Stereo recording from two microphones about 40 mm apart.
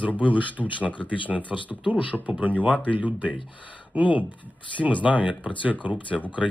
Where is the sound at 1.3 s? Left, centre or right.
Centre.